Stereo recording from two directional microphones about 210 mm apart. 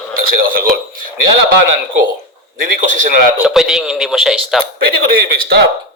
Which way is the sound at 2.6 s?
40° right (ahead or behind).